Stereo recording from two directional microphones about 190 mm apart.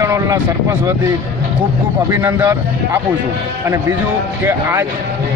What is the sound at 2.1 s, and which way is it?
Speech, 15° right (ahead or behind).